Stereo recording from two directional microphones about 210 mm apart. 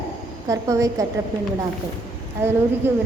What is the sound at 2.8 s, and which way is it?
Speech, 10° right (ahead or behind).